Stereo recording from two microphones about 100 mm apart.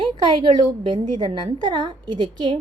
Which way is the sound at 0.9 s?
50° right (ahead or behind).